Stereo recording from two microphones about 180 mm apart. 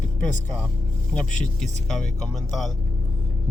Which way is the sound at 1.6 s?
Centre (ahead or behind).